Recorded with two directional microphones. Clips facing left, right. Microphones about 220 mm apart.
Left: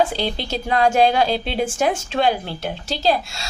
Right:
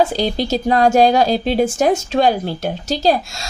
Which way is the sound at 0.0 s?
40° right (ahead or behind).